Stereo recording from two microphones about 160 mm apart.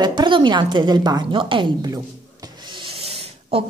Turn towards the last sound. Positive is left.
turn(degrees=-35)  # may be behind; listen again after turning